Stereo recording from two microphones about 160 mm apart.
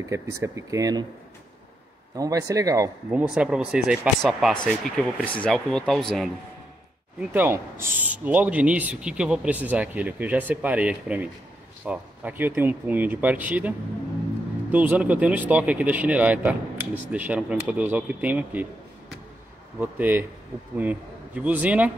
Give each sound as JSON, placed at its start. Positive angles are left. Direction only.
{"t": 0.1, "sound": "speech", "side_deg": -20}
{"t": 2.1, "sound": "speech", "side_deg": -20}
{"t": 3.1, "sound": "speech", "side_deg": -10}
{"t": 7.2, "sound": "speech", "side_deg": -10}
{"t": 19.8, "sound": "speech", "side_deg": -10}